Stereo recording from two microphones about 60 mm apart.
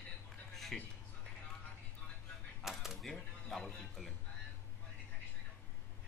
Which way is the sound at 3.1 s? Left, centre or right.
Centre.